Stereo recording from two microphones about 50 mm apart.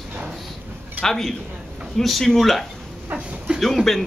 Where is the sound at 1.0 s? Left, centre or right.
Centre.